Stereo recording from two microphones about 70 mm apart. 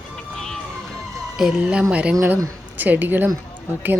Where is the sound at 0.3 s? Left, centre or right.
Centre.